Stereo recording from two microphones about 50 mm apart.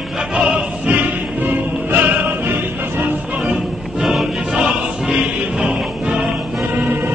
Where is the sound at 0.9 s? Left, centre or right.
Right.